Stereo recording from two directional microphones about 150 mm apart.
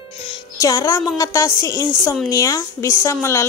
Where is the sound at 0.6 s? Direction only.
20° left (ahead or behind).